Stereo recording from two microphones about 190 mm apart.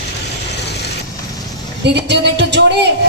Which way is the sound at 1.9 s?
60° right (ahead or behind).